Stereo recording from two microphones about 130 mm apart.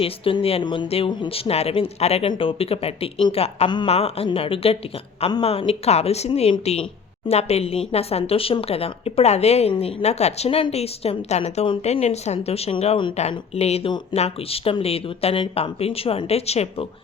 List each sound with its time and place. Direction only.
0.0 s speech: 45° left (ahead or behind)
0.9 s speech: 50° left (ahead or behind)